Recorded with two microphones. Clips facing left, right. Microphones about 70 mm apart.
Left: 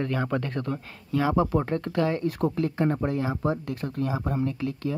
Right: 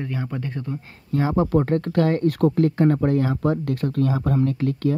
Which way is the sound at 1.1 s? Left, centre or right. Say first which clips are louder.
Right 2 dB; right.